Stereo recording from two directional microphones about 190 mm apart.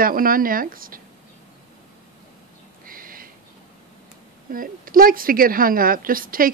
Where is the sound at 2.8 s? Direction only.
50° right (ahead or behind).